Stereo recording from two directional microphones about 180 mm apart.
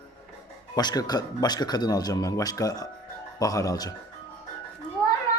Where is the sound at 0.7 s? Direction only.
20° left (ahead or behind).